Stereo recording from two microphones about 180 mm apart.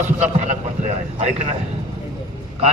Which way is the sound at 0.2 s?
40° right (ahead or behind).